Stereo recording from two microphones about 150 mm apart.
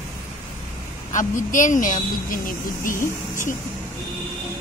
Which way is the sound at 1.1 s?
60° left (ahead or behind).